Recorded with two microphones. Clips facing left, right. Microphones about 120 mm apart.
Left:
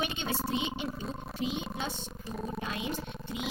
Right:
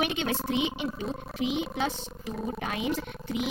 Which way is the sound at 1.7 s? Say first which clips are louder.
Right 6 dB; 90° right.